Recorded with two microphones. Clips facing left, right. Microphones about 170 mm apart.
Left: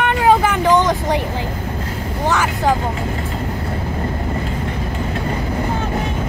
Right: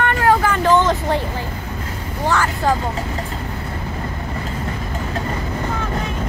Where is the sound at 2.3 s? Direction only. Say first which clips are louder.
Left 1 dB; 15° left (ahead or behind).